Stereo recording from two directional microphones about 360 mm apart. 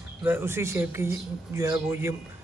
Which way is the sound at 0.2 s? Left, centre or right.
Centre.